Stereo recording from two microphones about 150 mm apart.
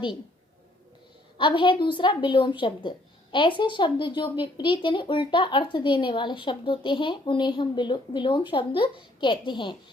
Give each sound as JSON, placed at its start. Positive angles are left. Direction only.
{"t": 1.4, "sound": "speech", "side_deg": 35}